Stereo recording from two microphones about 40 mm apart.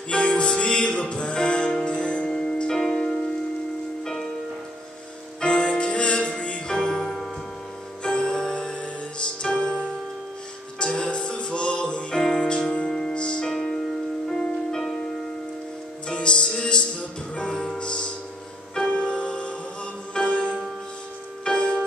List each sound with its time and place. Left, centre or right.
0.1 s music: left; by 4.3 s centre
5.4 s music: left
7.0 s music: centre
8.0 s music: centre
10.8 s music: left
16.1 s music: left